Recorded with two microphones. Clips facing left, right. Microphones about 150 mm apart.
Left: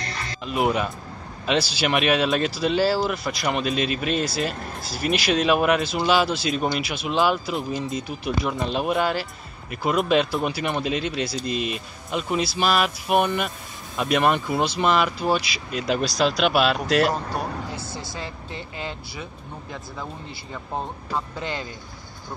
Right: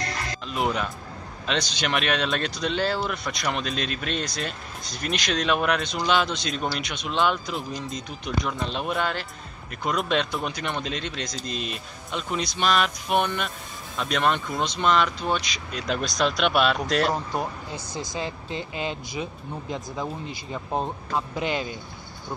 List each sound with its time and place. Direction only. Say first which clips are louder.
0.5 s speech: left 4 dB; 5° left (ahead or behind)
17.1 s speech: even; 15° right (ahead or behind)